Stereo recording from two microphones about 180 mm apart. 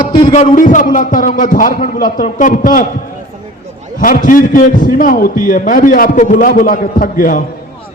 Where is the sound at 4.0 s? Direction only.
50° left (ahead or behind).